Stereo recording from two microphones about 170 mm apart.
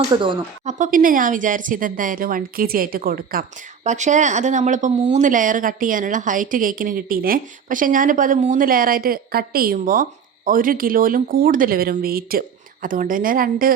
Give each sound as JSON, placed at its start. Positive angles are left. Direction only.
{"t": 0.1, "sound": "speech", "side_deg": -25}
{"t": 0.6, "sound": "speech", "side_deg": -45}
{"t": 3.8, "sound": "speech", "side_deg": -45}